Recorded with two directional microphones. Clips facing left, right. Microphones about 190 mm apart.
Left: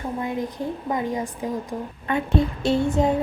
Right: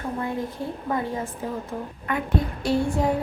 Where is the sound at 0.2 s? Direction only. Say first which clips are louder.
Left 2 dB; 15° left (ahead or behind).